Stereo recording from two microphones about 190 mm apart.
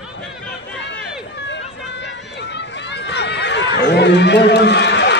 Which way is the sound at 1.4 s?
70° left (ahead or behind).